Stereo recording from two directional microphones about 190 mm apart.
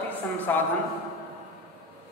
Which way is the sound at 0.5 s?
10° left (ahead or behind).